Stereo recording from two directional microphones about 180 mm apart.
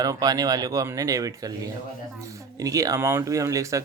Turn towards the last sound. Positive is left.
turn(degrees=-15)  # may be behind; listen again after turning